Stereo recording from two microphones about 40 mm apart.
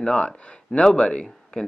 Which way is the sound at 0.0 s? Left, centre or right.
Left.